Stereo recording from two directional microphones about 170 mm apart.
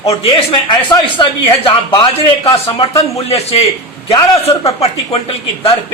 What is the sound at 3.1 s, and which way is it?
Speech, 35° left (ahead or behind).